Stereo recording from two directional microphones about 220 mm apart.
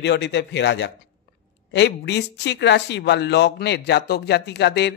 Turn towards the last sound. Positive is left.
turn(degrees=50)  # may be behind; listen again after turning